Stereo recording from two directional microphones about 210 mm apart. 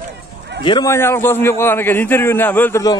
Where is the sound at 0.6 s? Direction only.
20° left (ahead or behind).